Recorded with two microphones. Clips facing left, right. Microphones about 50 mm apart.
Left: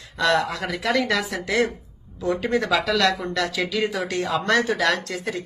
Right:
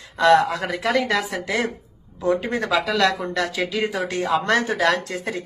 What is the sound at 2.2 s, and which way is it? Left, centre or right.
Speech, centre.